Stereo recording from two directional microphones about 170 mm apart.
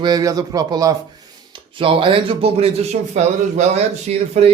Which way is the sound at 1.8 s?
30° right (ahead or behind).